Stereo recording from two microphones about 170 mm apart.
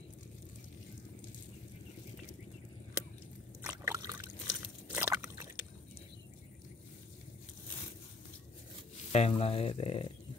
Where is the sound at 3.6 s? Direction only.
15° right (ahead or behind).